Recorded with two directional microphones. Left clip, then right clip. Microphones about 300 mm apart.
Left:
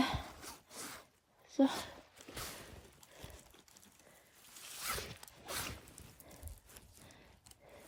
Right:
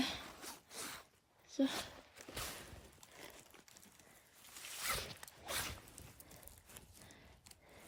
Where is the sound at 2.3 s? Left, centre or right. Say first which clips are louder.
Even; centre.